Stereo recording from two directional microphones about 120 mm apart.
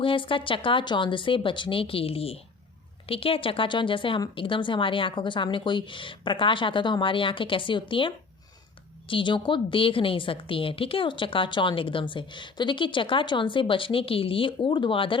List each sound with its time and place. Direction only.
0.0 s a woman's voice: 45° left (ahead or behind)